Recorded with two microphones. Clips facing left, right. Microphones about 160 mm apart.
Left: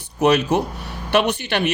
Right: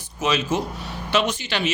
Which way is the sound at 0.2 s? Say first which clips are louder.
Left 6 dB; 65° left (ahead or behind).